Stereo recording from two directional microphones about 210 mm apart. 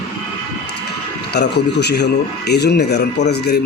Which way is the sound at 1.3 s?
50° left (ahead or behind).